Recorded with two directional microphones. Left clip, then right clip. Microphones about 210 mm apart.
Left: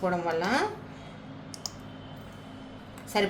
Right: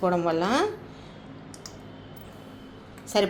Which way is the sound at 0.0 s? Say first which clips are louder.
Right 4 dB; 25° right (ahead or behind).